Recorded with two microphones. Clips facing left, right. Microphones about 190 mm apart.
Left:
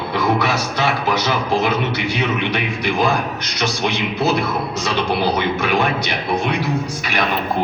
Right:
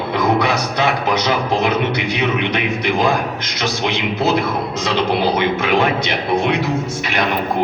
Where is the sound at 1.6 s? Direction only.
20° right (ahead or behind).